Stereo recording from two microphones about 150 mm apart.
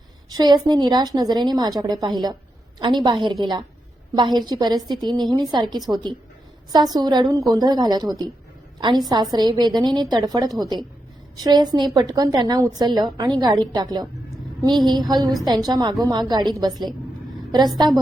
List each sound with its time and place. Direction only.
0.3 s a woman's voice: 30° right (ahead or behind)